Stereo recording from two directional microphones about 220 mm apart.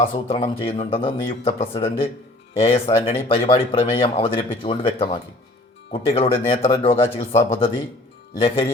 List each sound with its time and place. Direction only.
0.0 s speech: 25° left (ahead or behind)